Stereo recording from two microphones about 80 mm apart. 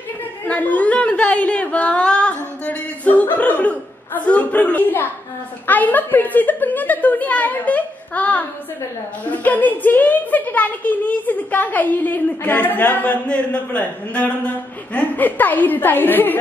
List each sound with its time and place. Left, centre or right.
0.5 s a woman's voice: centre